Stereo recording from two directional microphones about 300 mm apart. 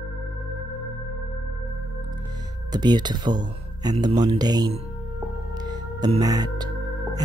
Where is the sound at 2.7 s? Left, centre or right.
Centre.